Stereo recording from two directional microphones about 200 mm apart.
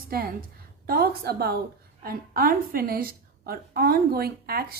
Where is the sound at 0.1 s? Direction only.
50° right (ahead or behind).